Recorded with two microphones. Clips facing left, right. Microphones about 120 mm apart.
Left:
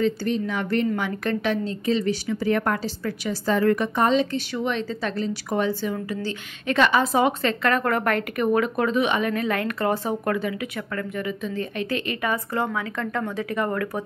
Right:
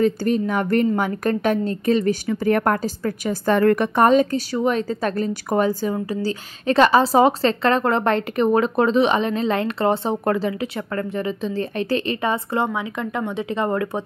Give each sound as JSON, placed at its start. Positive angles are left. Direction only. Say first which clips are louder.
{"t": 0.0, "sound": "a woman's voice", "louder": "right 4 dB", "side_deg": -45}